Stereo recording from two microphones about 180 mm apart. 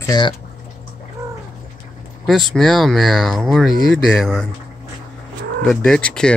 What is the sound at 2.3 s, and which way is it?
Speech, centre (ahead or behind).